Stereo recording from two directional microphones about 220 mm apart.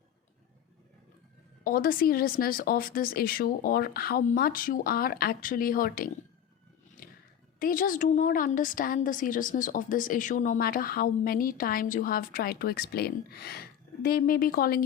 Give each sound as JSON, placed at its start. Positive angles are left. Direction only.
{"t": 1.6, "sound": "a woman's voice", "side_deg": 40}
{"t": 7.6, "sound": "a woman's voice", "side_deg": 40}